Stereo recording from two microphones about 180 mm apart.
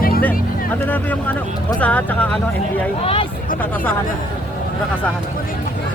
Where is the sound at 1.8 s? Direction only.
10° left (ahead or behind).